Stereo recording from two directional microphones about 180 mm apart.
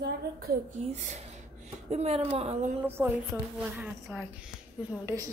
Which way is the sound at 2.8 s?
15° right (ahead or behind).